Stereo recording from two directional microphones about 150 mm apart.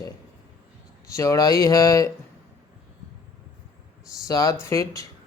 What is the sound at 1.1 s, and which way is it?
Speech, 20° left (ahead or behind).